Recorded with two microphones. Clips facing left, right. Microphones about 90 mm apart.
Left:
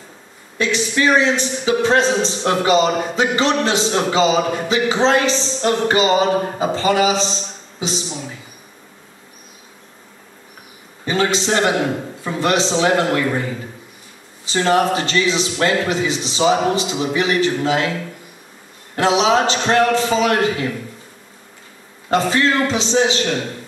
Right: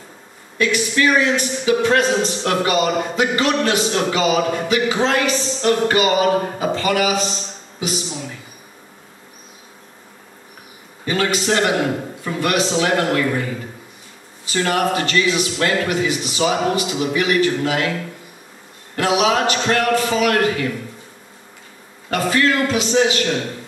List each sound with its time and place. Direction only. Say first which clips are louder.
0.6 s a man's voice: right 1 dB; 25° left (ahead or behind)
11.1 s a man's voice: left 1 dB; 25° left (ahead or behind)
18.9 s a man's voice: left 2 dB; 25° left (ahead or behind)
22.1 s a man's voice: left 1 dB; 25° left (ahead or behind)